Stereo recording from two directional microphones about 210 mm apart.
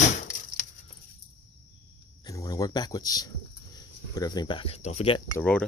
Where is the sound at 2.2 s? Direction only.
15° left (ahead or behind).